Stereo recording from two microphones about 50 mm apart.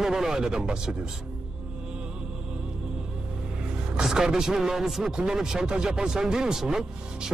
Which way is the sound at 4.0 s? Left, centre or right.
Centre.